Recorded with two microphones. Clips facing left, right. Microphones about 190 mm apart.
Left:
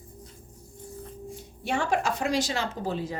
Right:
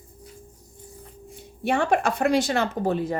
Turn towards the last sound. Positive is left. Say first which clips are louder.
# right 6 dB
turn(degrees=-55)  # may be behind; listen again after turning